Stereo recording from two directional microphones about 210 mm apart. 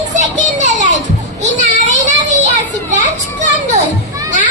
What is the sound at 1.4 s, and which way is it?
Child singing, 35° right (ahead or behind).